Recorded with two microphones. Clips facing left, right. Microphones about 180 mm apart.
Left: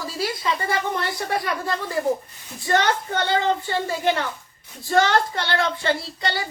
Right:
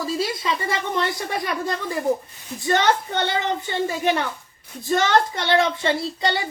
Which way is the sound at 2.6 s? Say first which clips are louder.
Right 1 dB; 20° right (ahead or behind).